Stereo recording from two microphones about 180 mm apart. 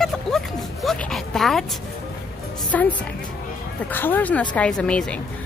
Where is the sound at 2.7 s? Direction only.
10° left (ahead or behind).